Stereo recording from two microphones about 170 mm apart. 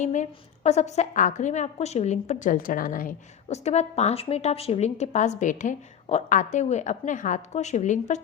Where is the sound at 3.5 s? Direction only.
40° left (ahead or behind).